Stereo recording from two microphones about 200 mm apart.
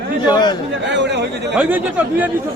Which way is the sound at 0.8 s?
60° right (ahead or behind).